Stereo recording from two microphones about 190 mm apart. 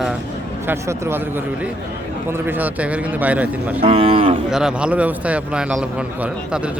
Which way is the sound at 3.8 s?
30° right (ahead or behind).